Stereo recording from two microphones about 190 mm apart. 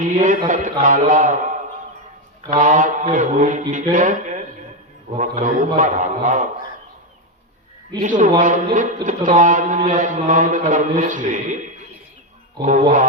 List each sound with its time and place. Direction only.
0.0 s speech: 40° right (ahead or behind)
2.5 s a man's voice: 40° right (ahead or behind)
8.0 s speech: 45° right (ahead or behind)